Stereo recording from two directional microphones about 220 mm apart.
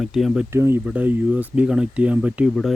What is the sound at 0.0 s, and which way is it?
Speech, centre (ahead or behind).